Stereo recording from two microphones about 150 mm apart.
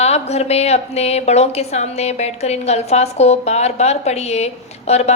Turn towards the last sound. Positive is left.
turn(degrees=45)  # may be behind; listen again after turning